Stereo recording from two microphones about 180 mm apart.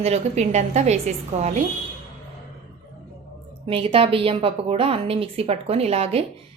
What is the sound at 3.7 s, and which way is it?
A woman's voice, 30° right (ahead or behind).